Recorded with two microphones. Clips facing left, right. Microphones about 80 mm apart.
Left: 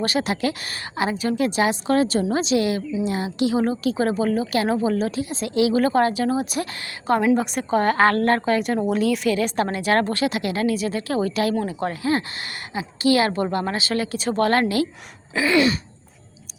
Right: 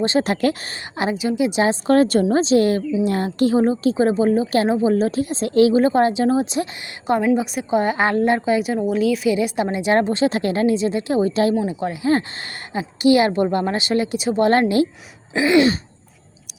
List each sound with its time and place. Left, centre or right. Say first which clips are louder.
0.2 s a woman's voice: right 4 dB; right
0.7 s speech: right 1 dB; right
1.1 s a woman's voice: right 4 dB; centre
1.6 s a woman's voice: right 6 dB; right
2.2 s a woman's voice: right 5 dB; right
4.9 s a woman's voice: right 4 dB; right
5.7 s speech: right 3 dB; right
7.2 s a woman's voice: right 1 dB; centre
9.3 s speech: right 2 dB; centre
10.2 s a woman's voice: right 4 dB; right
13.0 s speech: right 4 dB; right